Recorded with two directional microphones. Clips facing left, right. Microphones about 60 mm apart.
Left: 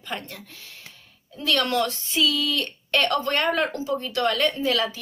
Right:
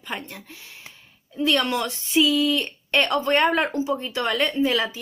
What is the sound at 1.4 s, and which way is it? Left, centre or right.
A woman's voice, right.